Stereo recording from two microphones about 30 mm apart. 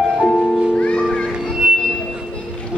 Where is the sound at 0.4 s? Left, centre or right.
Left.